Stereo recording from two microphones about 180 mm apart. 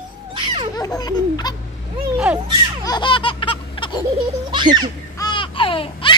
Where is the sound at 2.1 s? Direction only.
5° right (ahead or behind).